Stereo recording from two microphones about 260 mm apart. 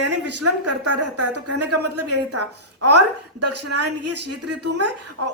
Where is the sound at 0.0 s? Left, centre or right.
Right.